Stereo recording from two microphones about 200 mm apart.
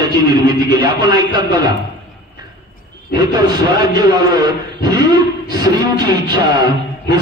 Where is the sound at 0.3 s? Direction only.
20° right (ahead or behind).